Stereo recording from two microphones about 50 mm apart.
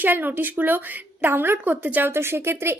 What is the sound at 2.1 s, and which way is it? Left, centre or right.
Speech, right.